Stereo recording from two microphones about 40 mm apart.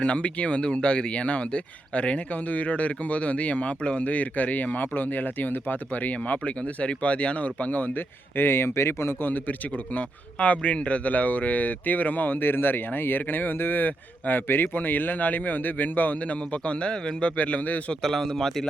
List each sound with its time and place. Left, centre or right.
0.0 s speech: left
8.4 s speech: left
9.2 s speech: left
10.3 s speech: left
12.4 s speech: left
16.2 s a man's voice: left
17.3 s speech: left
18.0 s a man's voice: centre